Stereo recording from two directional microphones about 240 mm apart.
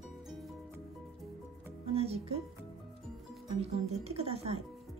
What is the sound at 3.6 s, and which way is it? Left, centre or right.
Speech, right.